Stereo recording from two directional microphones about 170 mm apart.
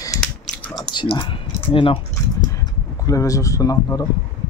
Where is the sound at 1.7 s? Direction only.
30° left (ahead or behind).